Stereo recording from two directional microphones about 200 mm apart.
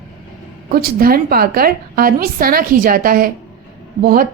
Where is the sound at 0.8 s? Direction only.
50° right (ahead or behind).